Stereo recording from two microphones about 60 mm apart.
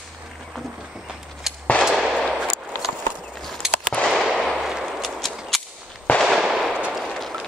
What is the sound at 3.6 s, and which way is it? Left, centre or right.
Fireworks, centre.